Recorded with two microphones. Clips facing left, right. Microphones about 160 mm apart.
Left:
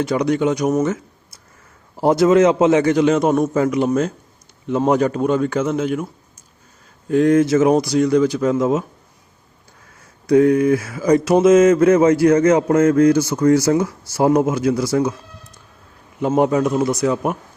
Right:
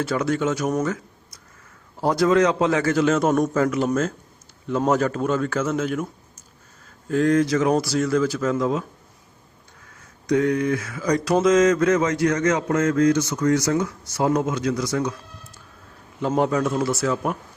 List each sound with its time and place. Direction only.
0.0 s speech: 15° left (ahead or behind)
2.0 s mantra: 25° left (ahead or behind)
3.5 s a man's voice: 15° left (ahead or behind)
7.1 s mantra: 20° left (ahead or behind)
7.7 s speech: 5° right (ahead or behind)
8.4 s mantra: 25° left (ahead or behind)
10.2 s mantra: 30° left (ahead or behind)
16.2 s a man's voice: 15° left (ahead or behind)